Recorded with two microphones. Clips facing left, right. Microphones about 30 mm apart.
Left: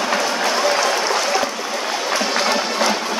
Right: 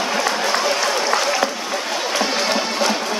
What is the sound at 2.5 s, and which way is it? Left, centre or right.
Music, centre.